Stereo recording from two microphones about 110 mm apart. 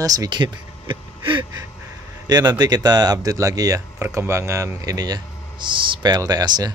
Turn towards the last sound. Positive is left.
turn(degrees=-40)  # may be behind; listen again after turning